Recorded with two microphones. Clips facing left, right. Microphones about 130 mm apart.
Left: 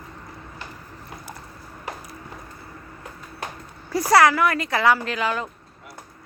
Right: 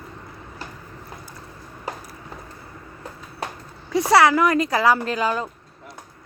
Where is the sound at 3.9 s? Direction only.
25° right (ahead or behind).